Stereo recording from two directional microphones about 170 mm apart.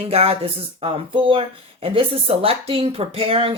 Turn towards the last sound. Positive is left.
turn(degrees=-35)  # may be behind; listen again after turning